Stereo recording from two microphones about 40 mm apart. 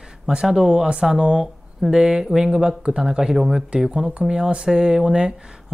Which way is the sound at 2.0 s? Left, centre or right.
Right.